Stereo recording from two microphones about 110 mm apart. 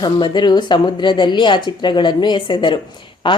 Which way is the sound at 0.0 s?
40° left (ahead or behind).